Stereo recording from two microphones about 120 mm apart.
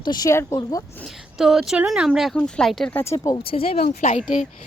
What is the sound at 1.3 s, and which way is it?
Speech, 5° right (ahead or behind).